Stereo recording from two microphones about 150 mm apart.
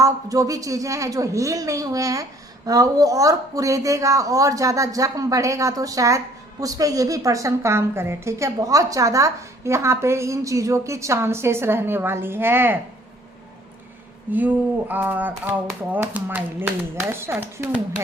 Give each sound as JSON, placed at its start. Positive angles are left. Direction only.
{"t": 0.0, "sound": "a woman's voice", "side_deg": -20}
{"t": 14.3, "sound": "speech", "side_deg": -10}